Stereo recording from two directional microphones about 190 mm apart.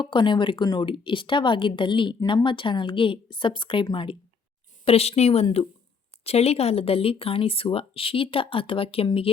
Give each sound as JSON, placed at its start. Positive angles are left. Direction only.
{"t": 0.0, "sound": "speech", "side_deg": 25}